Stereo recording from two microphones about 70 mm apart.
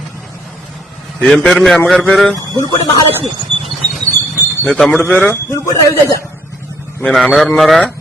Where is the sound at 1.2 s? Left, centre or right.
Centre.